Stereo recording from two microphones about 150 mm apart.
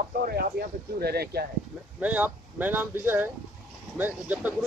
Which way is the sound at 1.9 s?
10° right (ahead or behind).